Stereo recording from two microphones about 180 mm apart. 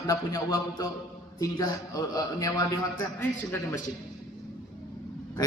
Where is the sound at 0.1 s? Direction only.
20° left (ahead or behind).